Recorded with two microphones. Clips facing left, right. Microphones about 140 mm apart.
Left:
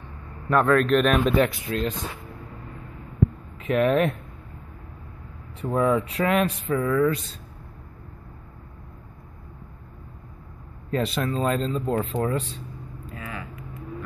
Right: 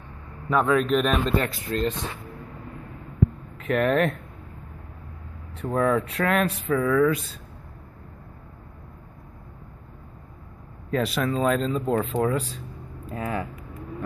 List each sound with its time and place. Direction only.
0.5 s speech: centre (ahead or behind)
1.2 s speech: 15° left (ahead or behind)
1.7 s speech: centre (ahead or behind)
3.5 s speech: centre (ahead or behind)
5.6 s speech: 5° left (ahead or behind)
10.9 s speech: 5° right (ahead or behind)
13.1 s vehicle: 40° right (ahead or behind)